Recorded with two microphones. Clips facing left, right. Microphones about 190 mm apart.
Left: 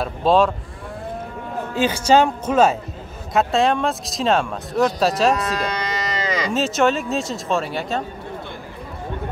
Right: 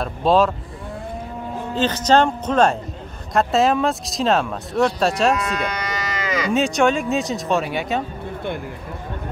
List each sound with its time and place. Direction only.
0.0 s speech: centre (ahead or behind)
1.8 s speech: 10° left (ahead or behind)
5.4 s speech: 35° left (ahead or behind)
6.5 s speech: centre (ahead or behind)